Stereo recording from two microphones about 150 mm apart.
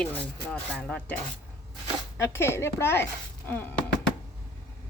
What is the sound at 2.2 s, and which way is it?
Speech, 15° left (ahead or behind).